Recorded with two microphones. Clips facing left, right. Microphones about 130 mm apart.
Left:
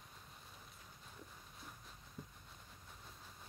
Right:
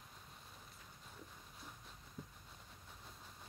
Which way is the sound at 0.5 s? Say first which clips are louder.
Even; centre (ahead or behind).